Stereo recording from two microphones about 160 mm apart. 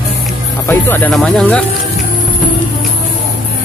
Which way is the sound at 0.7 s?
15° left (ahead or behind).